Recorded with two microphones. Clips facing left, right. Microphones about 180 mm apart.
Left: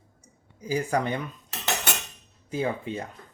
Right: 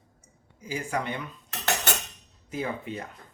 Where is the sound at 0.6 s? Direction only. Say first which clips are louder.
Left 5 dB; 40° left (ahead or behind).